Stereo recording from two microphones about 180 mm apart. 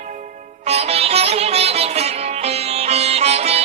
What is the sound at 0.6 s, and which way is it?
Music, 35° right (ahead or behind).